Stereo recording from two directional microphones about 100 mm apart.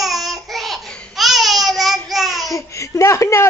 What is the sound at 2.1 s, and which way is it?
Child singing, centre (ahead or behind).